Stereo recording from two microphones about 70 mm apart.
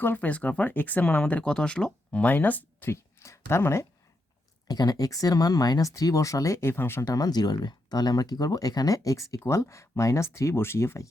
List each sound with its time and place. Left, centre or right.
0.0 s speech: left
2.9 s speech: left
4.7 s speech: left
6.7 s speech: left
7.0 s speech: left